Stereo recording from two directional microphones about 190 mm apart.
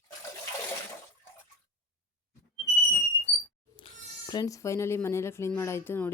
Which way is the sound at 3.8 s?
25° left (ahead or behind).